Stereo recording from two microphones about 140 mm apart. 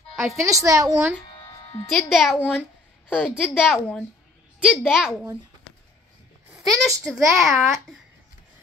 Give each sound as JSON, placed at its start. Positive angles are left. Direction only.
{"t": 0.4, "sound": "a woman's voice", "side_deg": -25}
{"t": 1.3, "sound": "music", "side_deg": 30}
{"t": 1.9, "sound": "a child's voice", "side_deg": 0}
{"t": 6.6, "sound": "a child's voice", "side_deg": 0}